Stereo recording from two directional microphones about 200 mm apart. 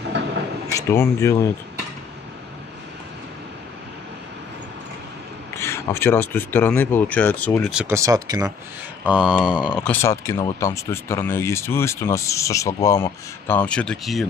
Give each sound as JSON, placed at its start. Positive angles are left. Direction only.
{"t": 0.7, "sound": "speech", "side_deg": 15}
{"t": 5.6, "sound": "speech", "side_deg": 15}
{"t": 7.7, "sound": "speech", "side_deg": -10}
{"t": 9.0, "sound": "speech", "side_deg": -5}
{"t": 9.8, "sound": "speech", "side_deg": 15}